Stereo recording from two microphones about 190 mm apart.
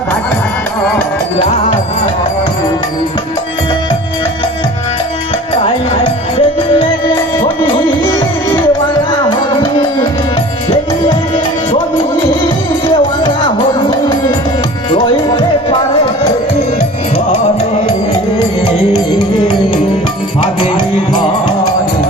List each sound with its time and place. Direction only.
5.6 s music: 30° left (ahead or behind)
9.3 s music: 25° left (ahead or behind)
14.8 s music: 25° left (ahead or behind)
20.6 s music: 25° left (ahead or behind)